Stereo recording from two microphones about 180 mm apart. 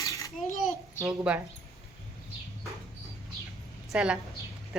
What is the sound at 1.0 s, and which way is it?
Speech, 5° right (ahead or behind).